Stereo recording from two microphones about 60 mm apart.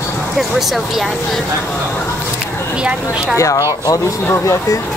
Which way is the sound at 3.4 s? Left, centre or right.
Left.